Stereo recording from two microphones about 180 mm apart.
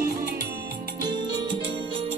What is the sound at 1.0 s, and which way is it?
Music, 25° right (ahead or behind).